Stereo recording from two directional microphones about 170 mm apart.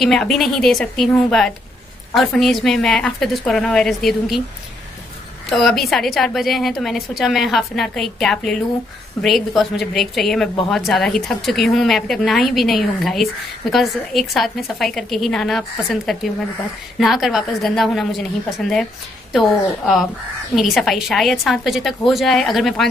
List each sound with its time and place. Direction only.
0.0 s a woman's voice: centre (ahead or behind)
5.5 s a woman's voice: centre (ahead or behind)
19.3 s a woman's voice: centre (ahead or behind)